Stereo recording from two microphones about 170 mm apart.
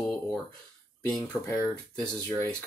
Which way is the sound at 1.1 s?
10° left (ahead or behind).